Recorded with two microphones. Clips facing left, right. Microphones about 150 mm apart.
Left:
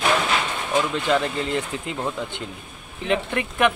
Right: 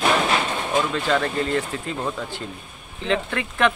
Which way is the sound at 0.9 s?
15° left (ahead or behind).